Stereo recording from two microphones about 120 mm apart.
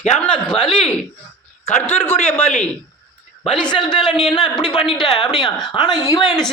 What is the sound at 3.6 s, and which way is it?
A woman's voice, 40° left (ahead or behind).